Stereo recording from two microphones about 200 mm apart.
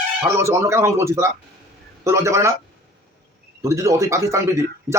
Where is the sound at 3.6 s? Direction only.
15° right (ahead or behind).